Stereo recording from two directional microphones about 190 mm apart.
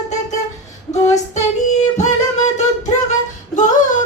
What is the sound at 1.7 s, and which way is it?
Singing, 40° left (ahead or behind).